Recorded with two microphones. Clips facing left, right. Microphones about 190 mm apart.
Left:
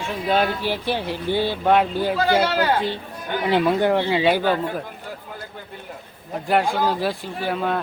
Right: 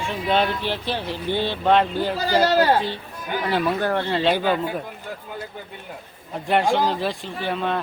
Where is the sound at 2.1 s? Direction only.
40° right (ahead or behind).